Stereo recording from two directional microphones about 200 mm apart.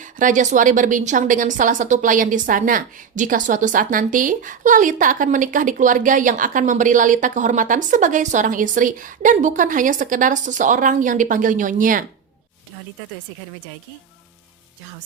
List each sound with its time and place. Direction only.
0.0 s a woman's voice: 40° right (ahead or behind)